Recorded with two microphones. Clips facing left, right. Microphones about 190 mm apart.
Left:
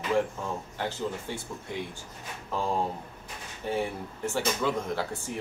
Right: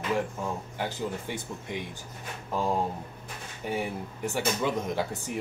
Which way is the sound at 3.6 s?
15° right (ahead or behind).